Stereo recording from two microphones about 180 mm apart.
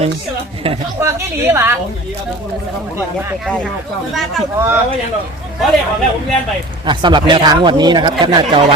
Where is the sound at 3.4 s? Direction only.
5° left (ahead or behind).